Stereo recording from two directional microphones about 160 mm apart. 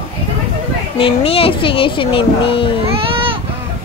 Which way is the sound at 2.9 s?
35° right (ahead or behind).